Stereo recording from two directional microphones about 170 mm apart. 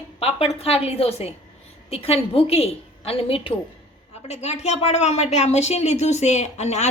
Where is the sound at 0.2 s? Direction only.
35° left (ahead or behind).